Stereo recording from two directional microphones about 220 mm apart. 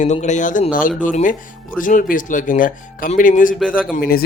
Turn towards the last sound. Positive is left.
turn(degrees=40)  # may be behind; listen again after turning